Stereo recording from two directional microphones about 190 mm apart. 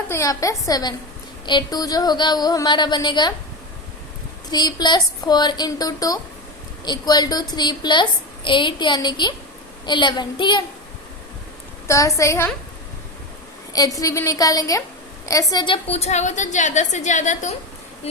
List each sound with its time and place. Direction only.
0.1 s a woman's voice: 15° left (ahead or behind)
4.5 s a woman's voice: 20° left (ahead or behind)
11.9 s a woman's voice: 15° left (ahead or behind)
13.7 s a woman's voice: 20° left (ahead or behind)